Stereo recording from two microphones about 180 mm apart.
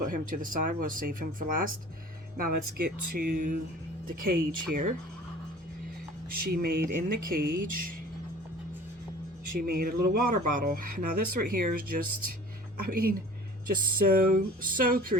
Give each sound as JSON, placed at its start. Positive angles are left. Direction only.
{"t": 0.0, "sound": "speech", "side_deg": -50}
{"t": 6.3, "sound": "speech", "side_deg": -55}
{"t": 9.6, "sound": "speech", "side_deg": -55}